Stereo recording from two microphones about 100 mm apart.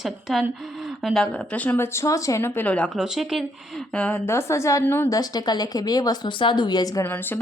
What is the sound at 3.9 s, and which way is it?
Speech, 15° left (ahead or behind).